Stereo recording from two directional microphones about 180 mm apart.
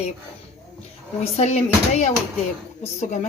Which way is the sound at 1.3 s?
40° left (ahead or behind).